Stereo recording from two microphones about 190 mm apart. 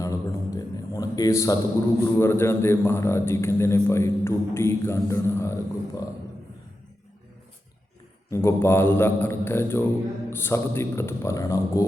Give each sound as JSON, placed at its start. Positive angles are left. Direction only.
{"t": 0.0, "sound": "a sound", "side_deg": 15}
{"t": 2.0, "sound": "a man's voice", "side_deg": 15}
{"t": 8.3, "sound": "a man's voice", "side_deg": 15}